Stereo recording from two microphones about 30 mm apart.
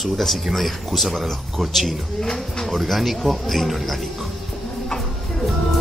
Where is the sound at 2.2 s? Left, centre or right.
Centre.